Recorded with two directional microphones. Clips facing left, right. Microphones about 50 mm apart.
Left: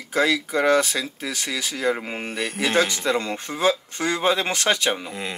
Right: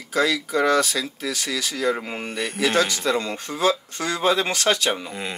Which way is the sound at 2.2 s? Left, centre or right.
Centre.